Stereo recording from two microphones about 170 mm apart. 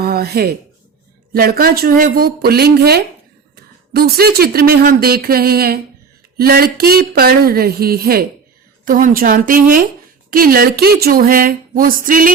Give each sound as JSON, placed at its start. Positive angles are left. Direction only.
{"t": 0.0, "sound": "a sound", "side_deg": -65}
{"t": 1.3, "sound": "speech", "side_deg": -60}
{"t": 8.8, "sound": "speech", "side_deg": -50}